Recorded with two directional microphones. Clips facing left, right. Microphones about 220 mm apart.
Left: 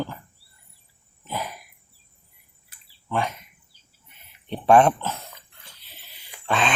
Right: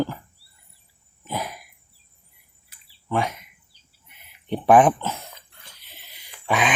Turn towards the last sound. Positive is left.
turn(degrees=-10)  # may be behind; listen again after turning